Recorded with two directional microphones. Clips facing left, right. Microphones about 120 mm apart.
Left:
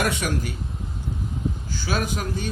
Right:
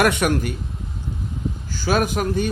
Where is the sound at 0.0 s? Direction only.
60° right (ahead or behind).